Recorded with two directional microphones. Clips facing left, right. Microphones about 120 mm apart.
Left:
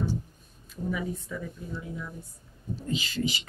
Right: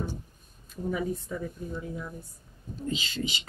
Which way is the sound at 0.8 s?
40° right (ahead or behind).